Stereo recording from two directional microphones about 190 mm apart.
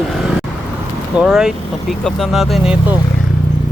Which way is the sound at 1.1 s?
5° right (ahead or behind).